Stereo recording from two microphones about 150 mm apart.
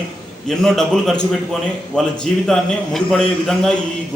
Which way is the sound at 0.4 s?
Centre (ahead or behind).